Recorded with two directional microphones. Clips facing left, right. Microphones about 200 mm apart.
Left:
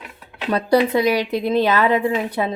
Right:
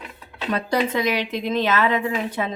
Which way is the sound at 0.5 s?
35° left (ahead or behind).